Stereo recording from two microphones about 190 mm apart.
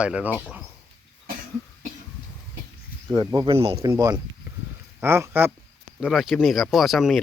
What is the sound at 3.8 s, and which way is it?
Speech, 20° right (ahead or behind).